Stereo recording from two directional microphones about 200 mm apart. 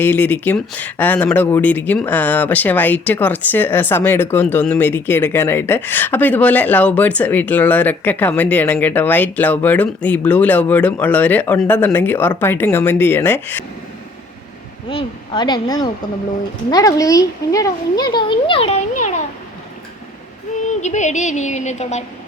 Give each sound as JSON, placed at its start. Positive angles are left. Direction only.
{"t": 0.0, "sound": "speech", "side_deg": 10}
{"t": 14.8, "sound": "speech", "side_deg": 25}
{"t": 20.8, "sound": "a woman's voice", "side_deg": 35}